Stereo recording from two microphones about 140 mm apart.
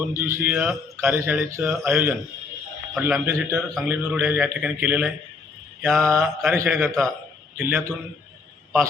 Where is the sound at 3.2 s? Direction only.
20° right (ahead or behind).